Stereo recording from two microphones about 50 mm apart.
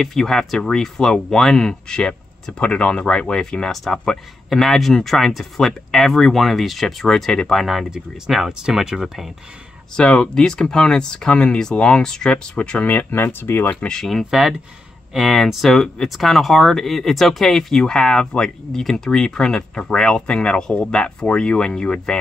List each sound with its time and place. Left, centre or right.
0.0 s speech: centre
7.9 s speech: centre
9.9 s speech: centre
12.5 s speech: left
13.1 s speech: left
13.7 s speech: centre
14.3 s speech: centre